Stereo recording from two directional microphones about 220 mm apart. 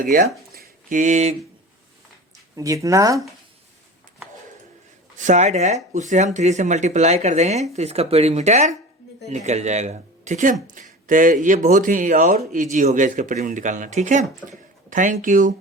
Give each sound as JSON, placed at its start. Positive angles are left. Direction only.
{"t": 0.0, "sound": "speech", "side_deg": -40}
{"t": 2.6, "sound": "speech", "side_deg": -15}
{"t": 5.1, "sound": "speech", "side_deg": -35}